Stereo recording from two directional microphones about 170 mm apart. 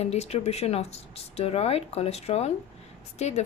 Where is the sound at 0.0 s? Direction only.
40° left (ahead or behind).